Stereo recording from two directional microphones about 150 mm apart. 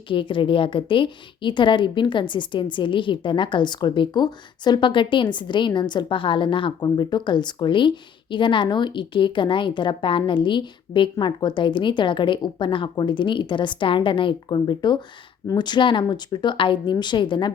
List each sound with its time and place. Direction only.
0.1 s a woman's voice: 35° left (ahead or behind)